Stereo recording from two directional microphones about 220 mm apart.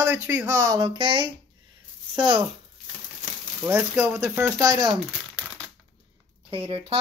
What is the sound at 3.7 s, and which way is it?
Speech, 10° right (ahead or behind).